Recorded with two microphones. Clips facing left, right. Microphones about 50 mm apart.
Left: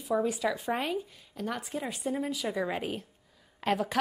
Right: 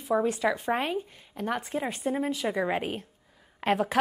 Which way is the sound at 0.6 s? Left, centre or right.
Centre.